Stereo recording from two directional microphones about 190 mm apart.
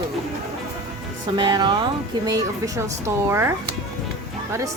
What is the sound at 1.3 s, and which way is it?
A woman's voice, 20° right (ahead or behind).